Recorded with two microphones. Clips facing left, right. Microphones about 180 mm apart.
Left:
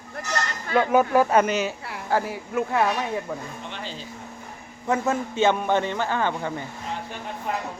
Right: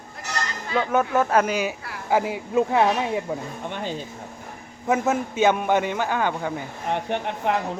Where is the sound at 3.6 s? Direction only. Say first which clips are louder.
Right 6 dB; 50° right (ahead or behind).